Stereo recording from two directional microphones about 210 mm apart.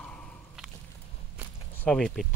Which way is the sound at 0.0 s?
5° left (ahead or behind).